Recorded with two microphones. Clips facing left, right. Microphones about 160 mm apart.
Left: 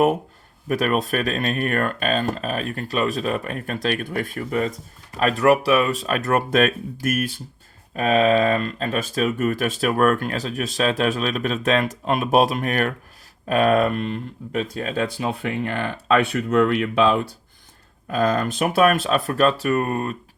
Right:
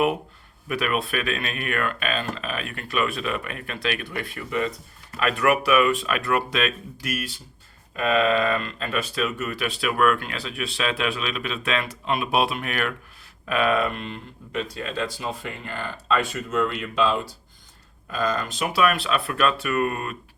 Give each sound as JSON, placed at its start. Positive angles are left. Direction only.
{"t": 0.7, "sound": "speech", "side_deg": 40}